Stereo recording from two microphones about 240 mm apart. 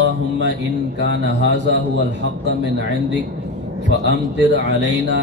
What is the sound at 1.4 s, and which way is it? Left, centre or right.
Speech, right.